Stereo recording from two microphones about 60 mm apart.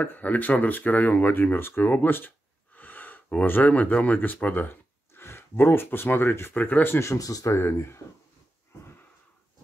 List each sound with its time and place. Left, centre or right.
0.0 s speech: left
4.6 s speech: left
7.1 s speech: left
7.5 s speech: left